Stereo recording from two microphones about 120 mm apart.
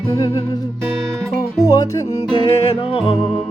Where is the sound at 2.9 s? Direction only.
50° left (ahead or behind).